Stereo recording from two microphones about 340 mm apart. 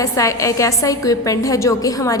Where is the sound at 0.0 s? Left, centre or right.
Centre.